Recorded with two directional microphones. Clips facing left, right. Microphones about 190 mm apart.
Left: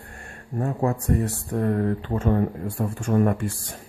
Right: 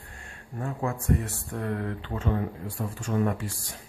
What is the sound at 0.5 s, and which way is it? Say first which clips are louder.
Speech: left 7 dB; 40° left (ahead or behind).